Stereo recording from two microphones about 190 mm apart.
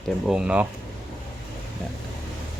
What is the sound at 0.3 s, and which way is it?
Speech, 5° right (ahead or behind).